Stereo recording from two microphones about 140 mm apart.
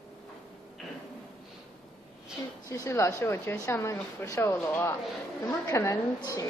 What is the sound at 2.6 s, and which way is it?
Speech, 25° left (ahead or behind).